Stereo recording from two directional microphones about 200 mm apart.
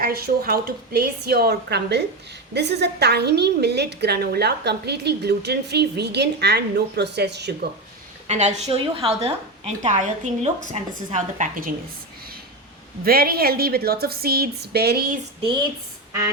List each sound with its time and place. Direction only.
0.0 s a woman's voice: 50° right (ahead or behind)
8.3 s a woman's voice: 35° right (ahead or behind)
13.1 s a woman's voice: 50° right (ahead or behind)